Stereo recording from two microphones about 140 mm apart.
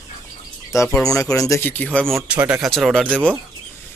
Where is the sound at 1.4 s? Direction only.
20° left (ahead or behind).